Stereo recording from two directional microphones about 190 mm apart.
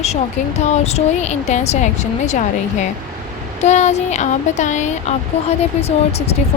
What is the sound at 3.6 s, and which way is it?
Speech, 35° left (ahead or behind).